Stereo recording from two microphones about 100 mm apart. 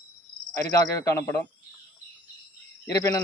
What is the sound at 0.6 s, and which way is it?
Speech, 30° left (ahead or behind).